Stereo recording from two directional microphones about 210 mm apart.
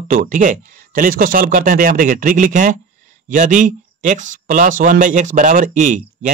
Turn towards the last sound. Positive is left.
turn(degrees=-40)  # may be behind; listen again after turning